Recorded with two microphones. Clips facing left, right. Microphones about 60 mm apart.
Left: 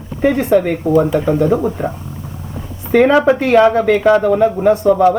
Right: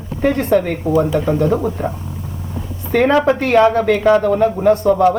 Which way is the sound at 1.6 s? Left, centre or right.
Centre.